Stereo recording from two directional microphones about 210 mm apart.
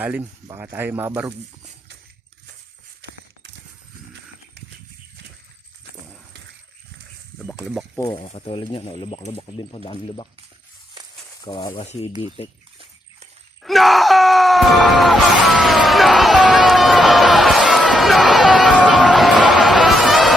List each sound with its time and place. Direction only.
0.0 s speech: 10° right (ahead or behind)
7.3 s speech: 5° right (ahead or behind)
7.9 s speech: 10° left (ahead or behind)
8.2 s speech: 30° left (ahead or behind)
11.3 s speech: 20° left (ahead or behind)
13.6 s groan: centre (ahead or behind)
19.0 s music: centre (ahead or behind)